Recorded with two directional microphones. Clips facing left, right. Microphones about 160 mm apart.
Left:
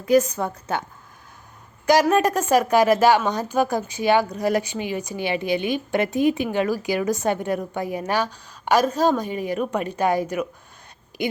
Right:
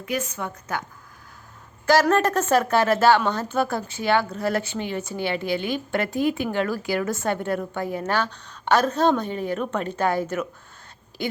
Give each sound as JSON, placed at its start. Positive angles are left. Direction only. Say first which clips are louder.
{"t": 0.0, "sound": "a woman's voice", "louder": "left 10 dB", "side_deg": 40}
{"t": 1.9, "sound": "a woman's voice", "louder": "left 1 dB", "side_deg": 15}